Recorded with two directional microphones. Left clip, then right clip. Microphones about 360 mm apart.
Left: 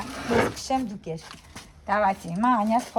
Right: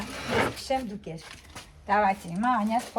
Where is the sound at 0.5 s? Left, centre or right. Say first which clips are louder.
Left 2 dB; centre.